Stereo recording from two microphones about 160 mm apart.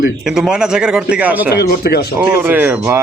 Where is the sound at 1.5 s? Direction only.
80° left.